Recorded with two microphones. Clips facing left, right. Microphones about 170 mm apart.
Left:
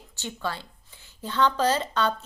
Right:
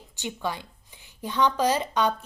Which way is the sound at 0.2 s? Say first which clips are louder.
Right 1 dB; 15° right (ahead or behind).